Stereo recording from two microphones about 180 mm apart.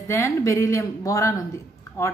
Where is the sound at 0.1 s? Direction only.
15° left (ahead or behind).